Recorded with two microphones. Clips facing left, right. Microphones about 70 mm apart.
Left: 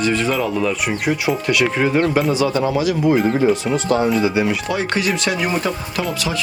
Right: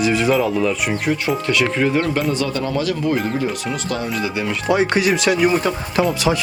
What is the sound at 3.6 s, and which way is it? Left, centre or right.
Speech, left.